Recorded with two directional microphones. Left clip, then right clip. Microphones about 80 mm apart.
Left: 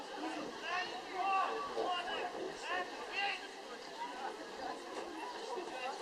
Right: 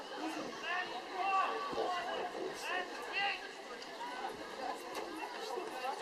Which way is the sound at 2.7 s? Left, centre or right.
Centre.